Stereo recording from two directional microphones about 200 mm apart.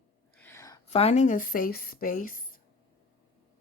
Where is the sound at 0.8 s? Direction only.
30° left (ahead or behind).